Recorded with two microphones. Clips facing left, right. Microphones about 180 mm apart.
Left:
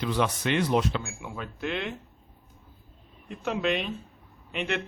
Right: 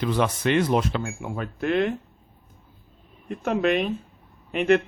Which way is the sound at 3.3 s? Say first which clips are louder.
Right 5 dB; 50° right (ahead or behind).